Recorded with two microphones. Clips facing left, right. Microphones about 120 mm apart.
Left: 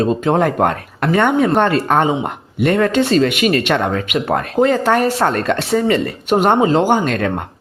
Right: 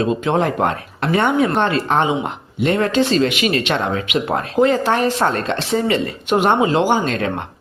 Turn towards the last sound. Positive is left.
turn(degrees=50)  # may be behind; listen again after turning